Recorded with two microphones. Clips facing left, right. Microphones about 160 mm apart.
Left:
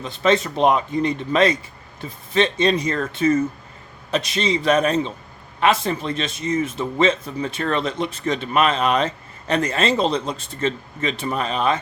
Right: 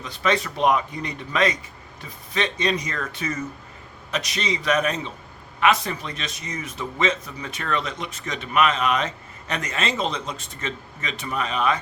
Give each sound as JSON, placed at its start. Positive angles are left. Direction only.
{"t": 0.0, "sound": "a man's voice", "side_deg": 25}